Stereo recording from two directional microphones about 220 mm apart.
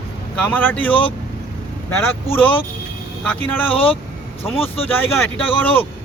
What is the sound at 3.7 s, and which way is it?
Speech, 25° left (ahead or behind).